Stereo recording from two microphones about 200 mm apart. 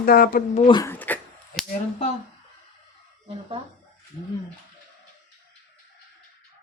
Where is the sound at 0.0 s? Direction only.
45° left (ahead or behind).